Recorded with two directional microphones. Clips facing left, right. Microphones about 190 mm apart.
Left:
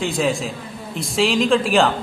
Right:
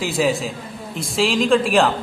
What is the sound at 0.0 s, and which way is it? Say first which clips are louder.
A man's voice: right 1 dB; 5° right (ahead or behind).